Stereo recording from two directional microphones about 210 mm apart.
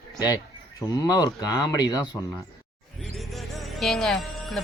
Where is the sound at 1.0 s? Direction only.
20° left (ahead or behind).